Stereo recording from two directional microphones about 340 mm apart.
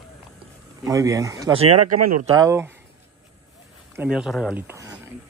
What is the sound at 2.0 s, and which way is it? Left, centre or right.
Speech, right.